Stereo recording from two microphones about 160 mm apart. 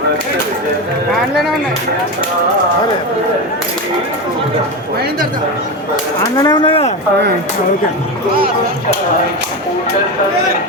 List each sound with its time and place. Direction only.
6.3 s speech: 25° left (ahead or behind)